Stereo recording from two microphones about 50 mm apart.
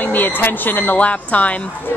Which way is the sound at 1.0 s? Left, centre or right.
Left.